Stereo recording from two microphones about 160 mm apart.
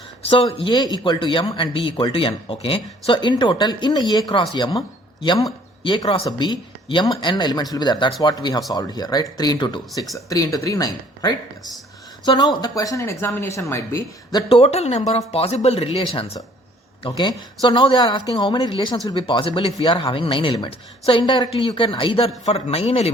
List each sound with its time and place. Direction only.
0.2 s speech: 35° left (ahead or behind); by 14.0 s 15° left (ahead or behind)
14.5 s speech: 40° left (ahead or behind)